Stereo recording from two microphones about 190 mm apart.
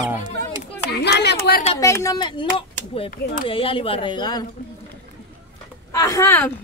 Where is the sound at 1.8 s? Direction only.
15° left (ahead or behind).